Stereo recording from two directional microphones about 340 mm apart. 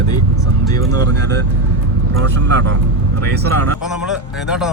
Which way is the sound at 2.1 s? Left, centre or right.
Right.